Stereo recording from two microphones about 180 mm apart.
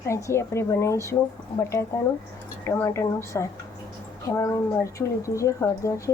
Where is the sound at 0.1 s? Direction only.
15° left (ahead or behind).